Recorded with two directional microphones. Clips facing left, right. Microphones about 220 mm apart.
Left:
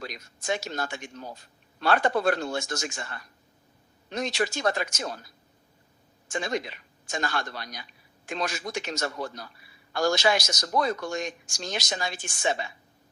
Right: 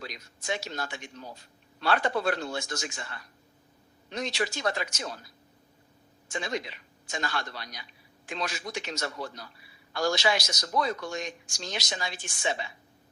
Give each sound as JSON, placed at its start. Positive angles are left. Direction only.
{"t": 0.0, "sound": "a man's voice", "side_deg": 45}
{"t": 6.2, "sound": "a man's voice", "side_deg": 45}